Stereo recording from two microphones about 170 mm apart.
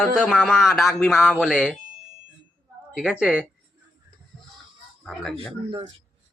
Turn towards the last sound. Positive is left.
turn(degrees=-35)  # may be behind; listen again after turning